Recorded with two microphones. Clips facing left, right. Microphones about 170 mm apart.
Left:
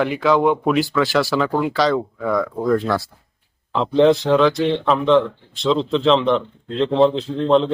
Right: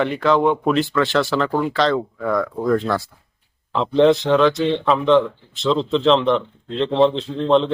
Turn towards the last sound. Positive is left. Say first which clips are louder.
# left 1 dB
turn(degrees=0)  # may be behind; listen again after turning